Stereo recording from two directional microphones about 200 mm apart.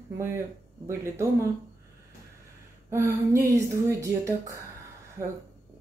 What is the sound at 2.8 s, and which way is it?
Speech, 15° right (ahead or behind).